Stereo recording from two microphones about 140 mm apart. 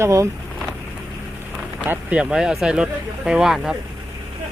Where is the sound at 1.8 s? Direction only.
10° right (ahead or behind).